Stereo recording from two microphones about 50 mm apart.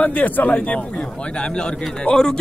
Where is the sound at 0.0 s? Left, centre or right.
Left.